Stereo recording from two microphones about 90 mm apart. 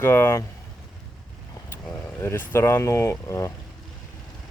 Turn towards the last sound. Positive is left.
turn(degrees=35)  # may be behind; listen again after turning